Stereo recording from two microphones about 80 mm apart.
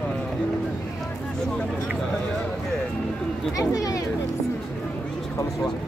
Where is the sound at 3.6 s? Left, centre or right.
Left.